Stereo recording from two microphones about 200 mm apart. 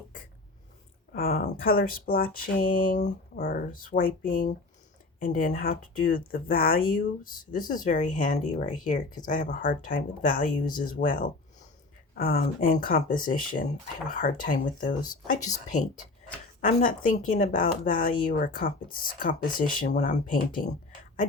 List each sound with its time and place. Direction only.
1.1 s speech: 45° left (ahead or behind)
16.6 s speech: 40° left (ahead or behind)